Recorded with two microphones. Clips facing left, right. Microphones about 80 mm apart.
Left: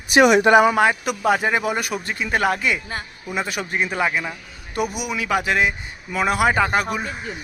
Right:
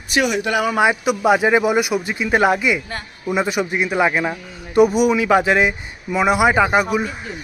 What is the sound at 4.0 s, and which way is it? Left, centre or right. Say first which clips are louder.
Speech: right 5 dB; right.